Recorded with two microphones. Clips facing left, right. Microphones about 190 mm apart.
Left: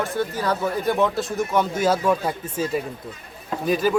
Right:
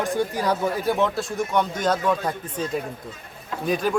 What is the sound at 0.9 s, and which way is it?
Speech, centre (ahead or behind).